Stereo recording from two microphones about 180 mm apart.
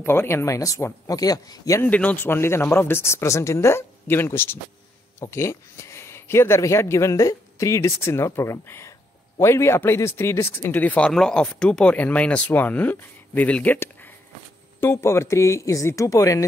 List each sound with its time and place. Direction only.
0.0 s speech: 15° left (ahead or behind)